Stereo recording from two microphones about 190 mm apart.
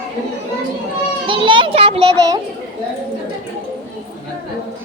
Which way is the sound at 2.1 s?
20° right (ahead or behind).